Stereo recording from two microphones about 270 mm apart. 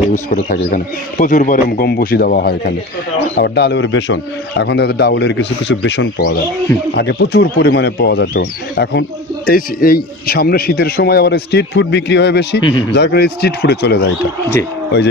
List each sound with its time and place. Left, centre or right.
0.1 s a man's voice: left